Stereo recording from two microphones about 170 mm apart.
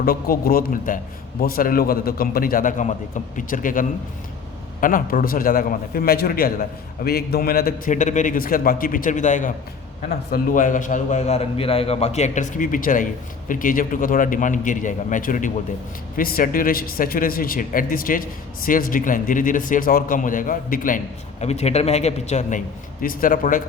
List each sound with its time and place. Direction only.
0.0 s a man's voice: 60° left (ahead or behind)
21.4 s a man's voice: 40° left (ahead or behind)